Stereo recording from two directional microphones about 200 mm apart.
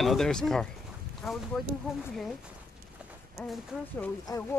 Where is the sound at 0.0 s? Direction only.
Centre (ahead or behind).